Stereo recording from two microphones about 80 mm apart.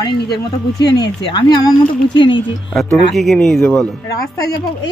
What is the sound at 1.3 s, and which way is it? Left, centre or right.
Speech, left.